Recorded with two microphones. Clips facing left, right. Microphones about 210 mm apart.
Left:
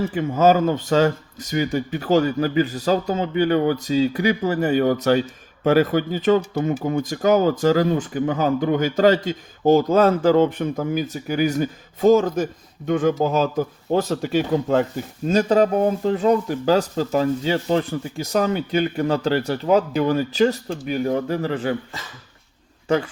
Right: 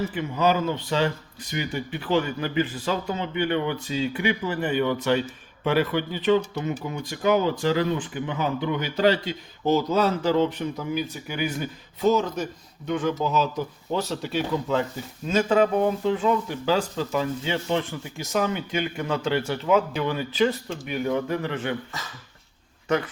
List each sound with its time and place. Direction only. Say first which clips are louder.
0.1 s speech: left 6 dB; 45° left (ahead or behind)
15.3 s speech: left 3 dB; 40° left (ahead or behind)